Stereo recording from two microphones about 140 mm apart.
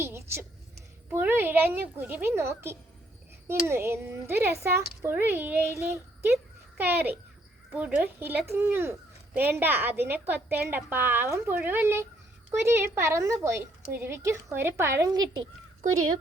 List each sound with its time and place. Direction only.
0.0 s a woman's voice: 20° right (ahead or behind)